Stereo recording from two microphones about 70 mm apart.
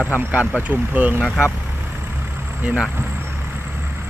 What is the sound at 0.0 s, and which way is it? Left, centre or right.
Speech, right.